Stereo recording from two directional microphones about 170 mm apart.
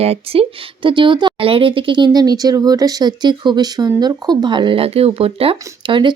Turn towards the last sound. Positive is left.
turn(degrees=-30)  # may be behind; listen again after turning